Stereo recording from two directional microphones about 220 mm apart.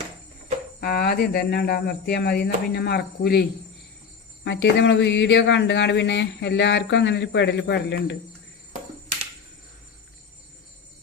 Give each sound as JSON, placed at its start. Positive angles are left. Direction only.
{"t": 0.8, "sound": "speech", "side_deg": 45}
{"t": 4.4, "sound": "speech", "side_deg": 50}